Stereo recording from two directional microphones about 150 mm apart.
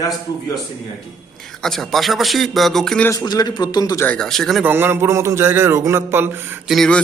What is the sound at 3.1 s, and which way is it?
Speech, 25° left (ahead or behind).